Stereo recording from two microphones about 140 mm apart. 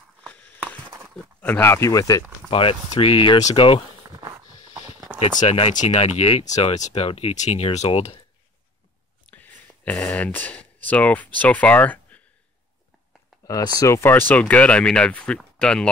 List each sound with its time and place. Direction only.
0.2 s a sound: 10° left (ahead or behind)
1.1 s speech: 10° left (ahead or behind); by 2.2 s 25° left (ahead or behind)
2.5 s speech: 40° left (ahead or behind)
5.2 s speech: 45° left (ahead or behind)
6.9 s speech: 45° left (ahead or behind)
9.3 s a sound: 10° left (ahead or behind)
11.3 s speech: 10° left (ahead or behind)
13.5 s speech: 25° left (ahead or behind); by 15.9 s 5° left (ahead or behind)